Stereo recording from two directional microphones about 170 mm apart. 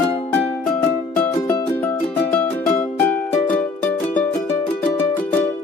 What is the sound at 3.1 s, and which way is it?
Music, 10° left (ahead or behind).